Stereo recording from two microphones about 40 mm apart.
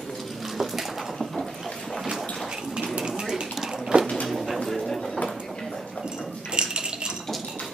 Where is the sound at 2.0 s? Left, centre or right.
Centre.